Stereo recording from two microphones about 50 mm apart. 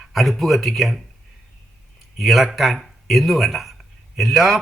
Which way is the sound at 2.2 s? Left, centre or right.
Centre.